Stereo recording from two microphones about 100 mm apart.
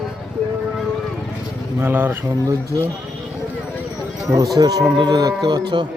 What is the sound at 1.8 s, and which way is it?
Speech, 20° right (ahead or behind).